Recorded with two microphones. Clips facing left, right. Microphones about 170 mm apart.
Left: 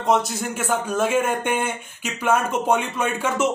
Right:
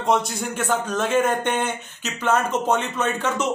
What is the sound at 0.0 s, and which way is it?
A man's voice, centre (ahead or behind).